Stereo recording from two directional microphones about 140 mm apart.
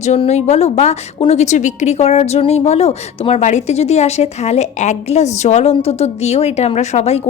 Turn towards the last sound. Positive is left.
turn(degrees=50)  # may be behind; listen again after turning